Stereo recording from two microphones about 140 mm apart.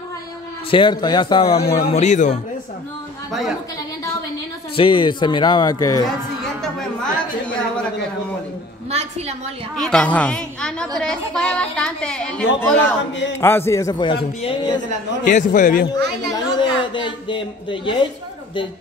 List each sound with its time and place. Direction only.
0.7 s speech: 35° left (ahead or behind)
1.9 s speech: 55° left (ahead or behind)
3.3 s a woman's voice: centre (ahead or behind)
4.7 s speech: 40° left (ahead or behind)
9.8 s speech: 5° left (ahead or behind); by 14.0 s 20° left (ahead or behind)
14.0 s speech: 35° left (ahead or behind)
15.2 s a man's voice: 65° left (ahead or behind)
16.5 s a woman's voice: 35° left (ahead or behind)